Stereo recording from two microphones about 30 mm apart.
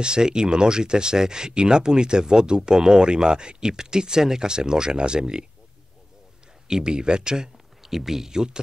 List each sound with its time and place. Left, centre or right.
0.0 s speech: right
6.7 s speech: right
7.8 s speech: centre